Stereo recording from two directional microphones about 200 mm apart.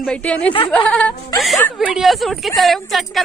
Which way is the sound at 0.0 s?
5° left (ahead or behind).